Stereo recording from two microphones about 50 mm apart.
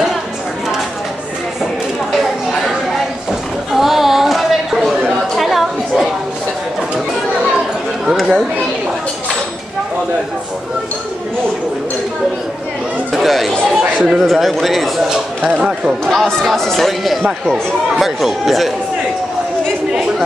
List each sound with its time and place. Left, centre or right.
3.7 s chatter: centre
5.4 s a sound: centre
13.1 s speech: centre
13.5 s speech: centre
14.1 s speech: centre
15.5 s speech: centre
16.1 s speech: centre